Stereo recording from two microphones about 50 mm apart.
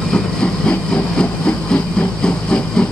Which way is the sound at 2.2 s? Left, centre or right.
Left.